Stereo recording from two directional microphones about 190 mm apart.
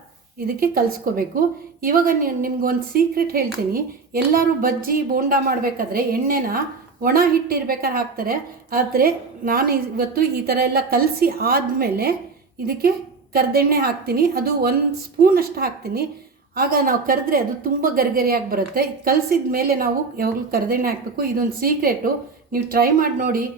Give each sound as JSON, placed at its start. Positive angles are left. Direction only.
{"t": 0.3, "sound": "a woman's voice", "side_deg": -50}
{"t": 13.3, "sound": "a woman's voice", "side_deg": -55}